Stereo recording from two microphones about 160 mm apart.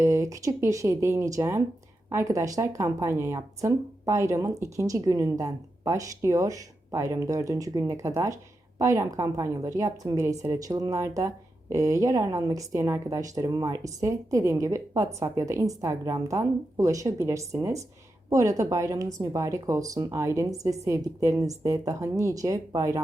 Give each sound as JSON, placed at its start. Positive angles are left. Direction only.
{"t": 0.0, "sound": "speech", "side_deg": -20}